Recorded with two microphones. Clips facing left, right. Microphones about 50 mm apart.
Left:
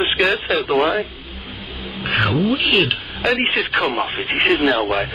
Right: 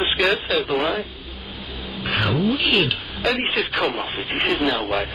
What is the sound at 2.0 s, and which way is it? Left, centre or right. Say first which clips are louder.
Speech: left 3 dB; left.